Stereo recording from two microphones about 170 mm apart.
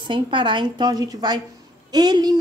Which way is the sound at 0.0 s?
30° right (ahead or behind).